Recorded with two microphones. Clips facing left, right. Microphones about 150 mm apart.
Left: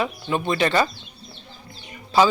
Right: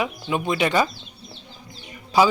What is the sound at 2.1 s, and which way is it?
Speech, 15° right (ahead or behind).